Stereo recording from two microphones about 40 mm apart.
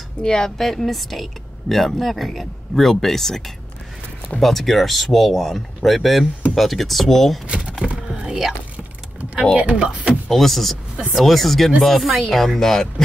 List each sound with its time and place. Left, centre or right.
0.2 s speech: centre
0.6 s speech: centre
7.4 s speech: right
8.1 s a sound: centre
9.6 s speech: right
10.3 s speech: centre